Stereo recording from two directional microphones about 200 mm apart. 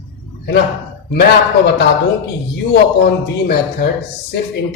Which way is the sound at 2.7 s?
55° left (ahead or behind).